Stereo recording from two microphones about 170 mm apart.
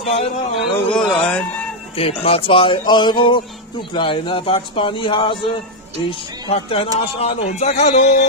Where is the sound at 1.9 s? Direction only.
35° left (ahead or behind).